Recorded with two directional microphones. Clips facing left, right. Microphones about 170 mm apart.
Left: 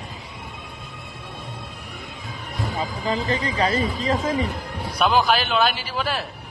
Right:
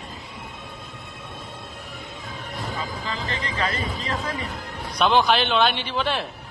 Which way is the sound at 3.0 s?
40° left (ahead or behind).